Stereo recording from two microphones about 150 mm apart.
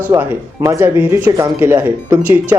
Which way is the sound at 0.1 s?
20° right (ahead or behind).